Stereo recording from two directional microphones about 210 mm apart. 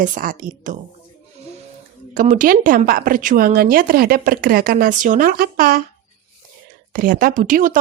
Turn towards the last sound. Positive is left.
turn(degrees=-40)  # may be behind; listen again after turning